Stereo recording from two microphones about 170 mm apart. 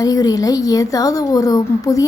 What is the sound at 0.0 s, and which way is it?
A woman's voice, 20° left (ahead or behind).